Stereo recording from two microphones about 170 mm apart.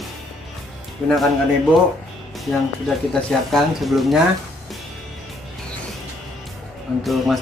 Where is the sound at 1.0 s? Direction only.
5° right (ahead or behind).